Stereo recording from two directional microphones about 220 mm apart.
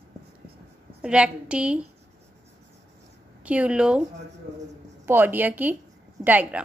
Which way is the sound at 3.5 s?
5° right (ahead or behind).